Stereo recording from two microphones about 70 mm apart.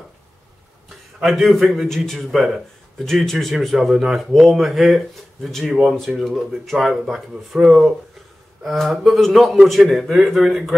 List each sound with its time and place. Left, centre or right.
1.2 s speech: centre